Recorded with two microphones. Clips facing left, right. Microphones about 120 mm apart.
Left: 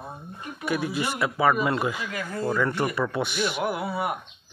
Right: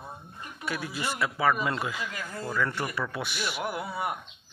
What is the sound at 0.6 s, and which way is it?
Speech, 15° left (ahead or behind).